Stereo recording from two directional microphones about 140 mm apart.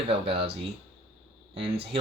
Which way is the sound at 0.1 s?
40° right (ahead or behind).